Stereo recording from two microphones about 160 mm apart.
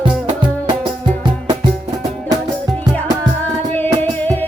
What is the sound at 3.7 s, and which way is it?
Music, 10° left (ahead or behind).